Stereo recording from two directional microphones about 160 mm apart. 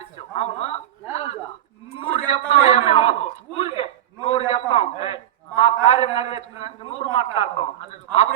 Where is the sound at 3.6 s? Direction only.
40° left (ahead or behind).